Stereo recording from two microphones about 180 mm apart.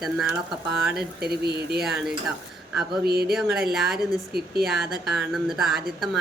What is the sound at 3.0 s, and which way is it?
Mantra, 60° right (ahead or behind).